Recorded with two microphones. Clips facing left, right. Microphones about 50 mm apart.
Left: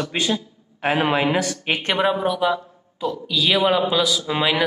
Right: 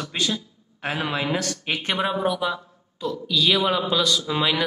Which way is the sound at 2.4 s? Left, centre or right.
Centre.